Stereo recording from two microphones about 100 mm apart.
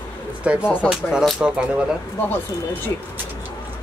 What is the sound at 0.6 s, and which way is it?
Speech, 20° left (ahead or behind).